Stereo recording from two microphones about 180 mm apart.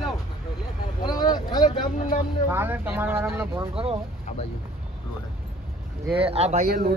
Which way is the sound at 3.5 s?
30° right (ahead or behind).